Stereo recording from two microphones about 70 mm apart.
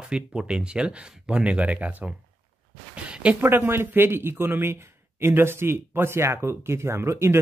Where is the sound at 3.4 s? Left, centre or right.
Right.